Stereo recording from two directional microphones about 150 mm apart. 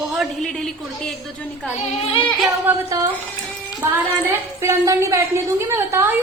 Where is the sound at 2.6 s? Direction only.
20° right (ahead or behind).